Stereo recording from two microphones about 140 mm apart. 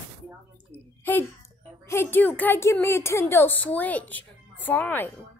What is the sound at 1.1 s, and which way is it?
A woman's voice, 15° left (ahead or behind).